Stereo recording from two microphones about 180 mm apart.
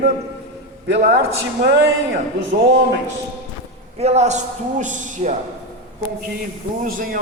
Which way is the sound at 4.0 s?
35° right (ahead or behind).